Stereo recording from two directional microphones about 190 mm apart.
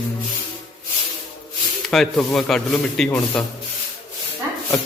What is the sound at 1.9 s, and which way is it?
Speech, centre (ahead or behind).